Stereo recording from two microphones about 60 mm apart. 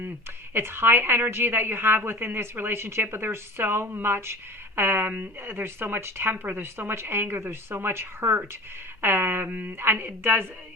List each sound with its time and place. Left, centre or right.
0.5 s a woman's voice: right